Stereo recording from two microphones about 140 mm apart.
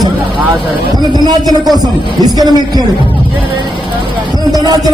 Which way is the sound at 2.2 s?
30° right (ahead or behind).